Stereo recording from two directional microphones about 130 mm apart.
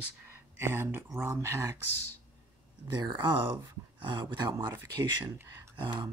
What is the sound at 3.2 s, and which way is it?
Speech, 40° right (ahead or behind).